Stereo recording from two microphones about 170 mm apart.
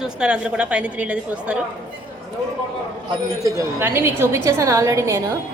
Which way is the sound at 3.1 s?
20° right (ahead or behind).